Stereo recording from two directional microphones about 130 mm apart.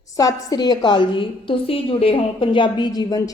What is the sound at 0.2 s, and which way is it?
A woman's voice, 30° left (ahead or behind).